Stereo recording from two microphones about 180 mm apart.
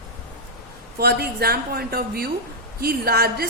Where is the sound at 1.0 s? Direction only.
60° right (ahead or behind).